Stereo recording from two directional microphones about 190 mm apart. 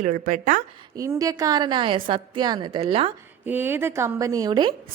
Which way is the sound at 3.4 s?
10° right (ahead or behind).